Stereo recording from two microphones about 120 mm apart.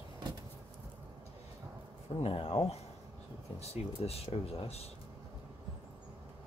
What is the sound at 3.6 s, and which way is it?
Speech, 55° left (ahead or behind).